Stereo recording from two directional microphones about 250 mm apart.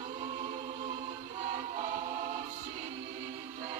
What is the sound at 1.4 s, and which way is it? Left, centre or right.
Choir, right.